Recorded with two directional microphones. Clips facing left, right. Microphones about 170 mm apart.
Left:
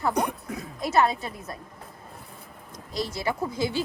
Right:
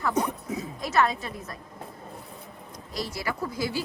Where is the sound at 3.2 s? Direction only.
25° left (ahead or behind).